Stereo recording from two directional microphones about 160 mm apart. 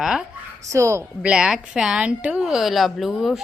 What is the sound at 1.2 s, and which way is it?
A woman's voice, 5° right (ahead or behind).